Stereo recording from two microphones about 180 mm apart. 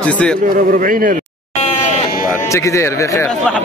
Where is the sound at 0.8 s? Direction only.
50° right (ahead or behind).